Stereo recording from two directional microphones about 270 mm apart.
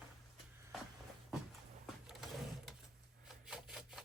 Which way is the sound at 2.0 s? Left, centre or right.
Centre.